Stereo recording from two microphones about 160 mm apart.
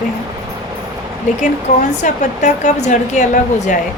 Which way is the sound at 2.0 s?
50° left (ahead or behind).